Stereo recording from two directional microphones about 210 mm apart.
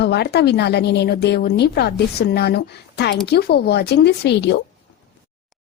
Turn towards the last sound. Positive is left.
turn(degrees=55)  # may be behind; listen again after turning